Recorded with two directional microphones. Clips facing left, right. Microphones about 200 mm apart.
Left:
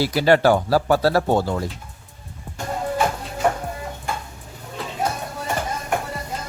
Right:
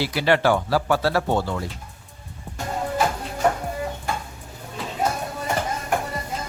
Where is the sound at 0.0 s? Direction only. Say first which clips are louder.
Left 4 dB; 40° left (ahead or behind).